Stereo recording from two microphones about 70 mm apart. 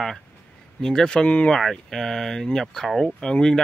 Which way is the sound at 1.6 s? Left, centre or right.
Centre.